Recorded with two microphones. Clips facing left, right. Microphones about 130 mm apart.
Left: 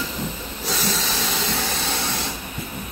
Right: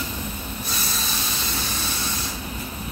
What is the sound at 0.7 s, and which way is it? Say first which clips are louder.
Train: left 8 dB; 90° left.